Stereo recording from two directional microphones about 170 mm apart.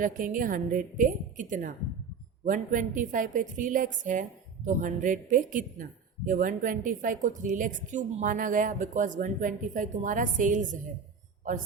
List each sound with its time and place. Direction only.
0.0 s a woman's voice: 50° right (ahead or behind)